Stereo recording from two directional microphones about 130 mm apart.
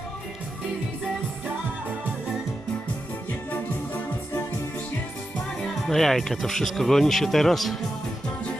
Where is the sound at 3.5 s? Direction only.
15° left (ahead or behind).